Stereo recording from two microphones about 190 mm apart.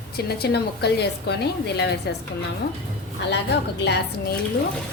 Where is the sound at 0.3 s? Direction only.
60° left (ahead or behind).